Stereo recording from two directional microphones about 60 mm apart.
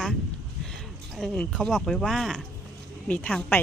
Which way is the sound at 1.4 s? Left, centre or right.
Centre.